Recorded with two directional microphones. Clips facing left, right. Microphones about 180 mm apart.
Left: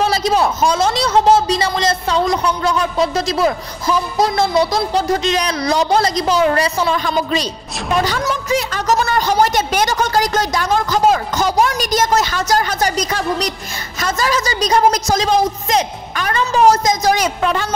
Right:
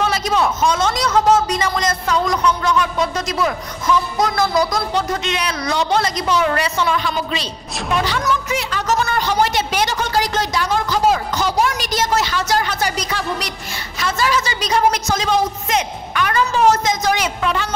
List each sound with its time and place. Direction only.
0.0 s a woman's voice: 35° left (ahead or behind)